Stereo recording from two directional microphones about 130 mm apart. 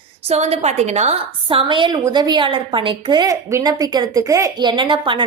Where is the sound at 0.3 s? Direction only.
55° right (ahead or behind); by 4.5 s 25° right (ahead or behind).